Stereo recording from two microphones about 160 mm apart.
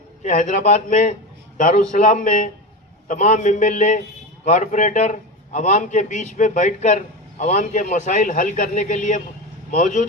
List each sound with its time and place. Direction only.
0.2 s a man's voice: 45° left (ahead or behind)